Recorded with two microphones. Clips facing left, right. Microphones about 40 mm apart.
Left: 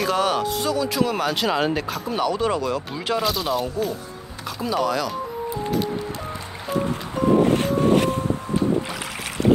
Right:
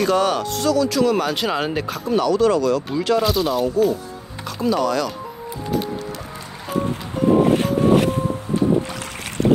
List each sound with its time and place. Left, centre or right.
0.0 s speech: centre
0.7 s speech: centre
1.1 s speech: centre
2.1 s speech: centre
3.2 s speech: centre
7.4 s vehicle: centre